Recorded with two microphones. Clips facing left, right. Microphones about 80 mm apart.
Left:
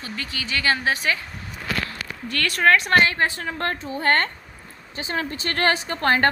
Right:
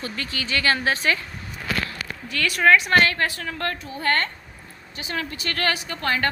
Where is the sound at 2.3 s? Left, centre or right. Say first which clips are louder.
Right 1 dB; left.